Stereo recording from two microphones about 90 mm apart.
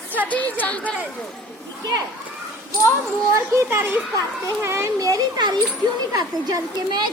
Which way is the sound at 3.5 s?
25° right (ahead or behind).